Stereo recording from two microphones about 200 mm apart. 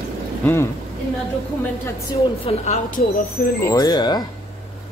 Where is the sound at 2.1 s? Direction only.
35° left (ahead or behind).